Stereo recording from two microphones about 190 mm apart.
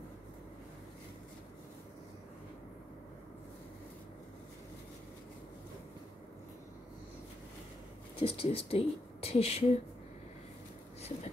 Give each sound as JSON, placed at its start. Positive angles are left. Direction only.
{"t": 8.2, "sound": "speech", "side_deg": 30}